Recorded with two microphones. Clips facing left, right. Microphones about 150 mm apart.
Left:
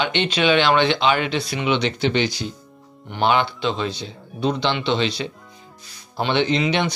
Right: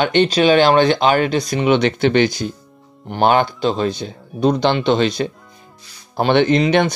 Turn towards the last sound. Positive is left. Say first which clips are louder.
# right 6 dB
turn(degrees=-50)  # may be behind; listen again after turning